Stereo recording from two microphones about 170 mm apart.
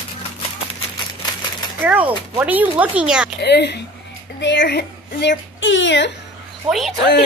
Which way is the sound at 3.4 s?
80° left.